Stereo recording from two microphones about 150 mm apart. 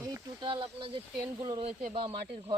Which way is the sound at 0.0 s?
25° right (ahead or behind).